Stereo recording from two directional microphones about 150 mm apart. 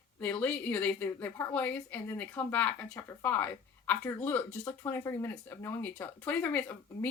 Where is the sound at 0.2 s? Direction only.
10° left (ahead or behind).